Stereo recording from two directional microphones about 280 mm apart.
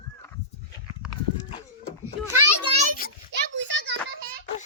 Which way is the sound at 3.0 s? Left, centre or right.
Left.